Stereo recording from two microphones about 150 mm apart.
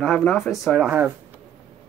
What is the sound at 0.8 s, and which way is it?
Speech, 10° right (ahead or behind).